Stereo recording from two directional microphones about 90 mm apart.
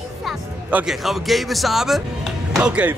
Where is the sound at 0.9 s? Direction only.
Centre (ahead or behind).